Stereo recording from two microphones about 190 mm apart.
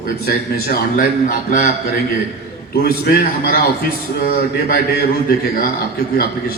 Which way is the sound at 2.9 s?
50° left (ahead or behind).